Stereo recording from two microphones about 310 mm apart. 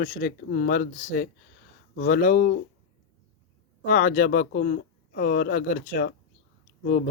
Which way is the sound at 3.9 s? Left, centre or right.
Left.